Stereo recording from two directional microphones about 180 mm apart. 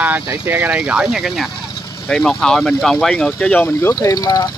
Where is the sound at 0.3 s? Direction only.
10° right (ahead or behind).